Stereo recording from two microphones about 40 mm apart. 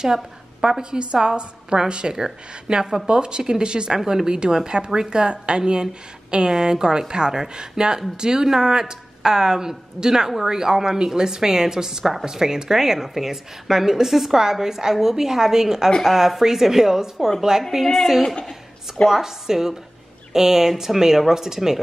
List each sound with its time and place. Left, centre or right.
0.0 s a woman's voice: centre